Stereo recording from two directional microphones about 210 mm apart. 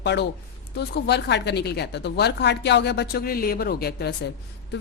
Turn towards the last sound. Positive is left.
turn(degrees=50)  # may be behind; listen again after turning